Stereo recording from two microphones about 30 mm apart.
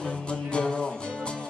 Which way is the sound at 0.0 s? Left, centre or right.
Left.